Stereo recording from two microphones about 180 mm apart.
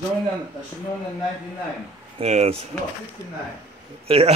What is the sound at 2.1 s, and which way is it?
Speech, 35° right (ahead or behind).